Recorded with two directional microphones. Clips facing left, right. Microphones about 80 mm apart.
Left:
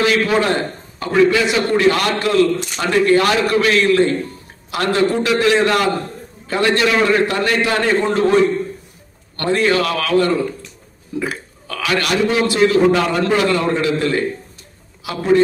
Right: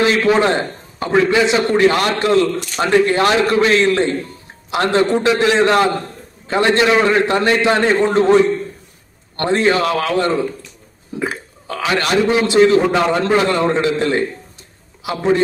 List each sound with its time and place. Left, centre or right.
0.0 s a man's voice: right
9.4 s a man's voice: right